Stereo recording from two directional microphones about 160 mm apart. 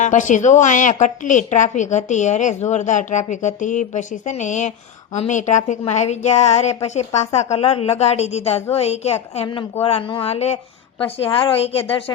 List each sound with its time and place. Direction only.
0.0 s a woman's voice: 50° left (ahead or behind); by 12.1 s 35° left (ahead or behind)